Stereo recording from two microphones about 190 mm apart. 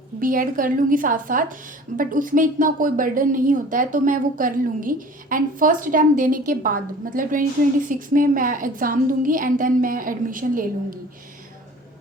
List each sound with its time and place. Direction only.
0.2 s a woman's voice: 45° right (ahead or behind)